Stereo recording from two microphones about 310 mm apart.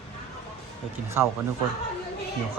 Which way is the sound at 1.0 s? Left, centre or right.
Centre.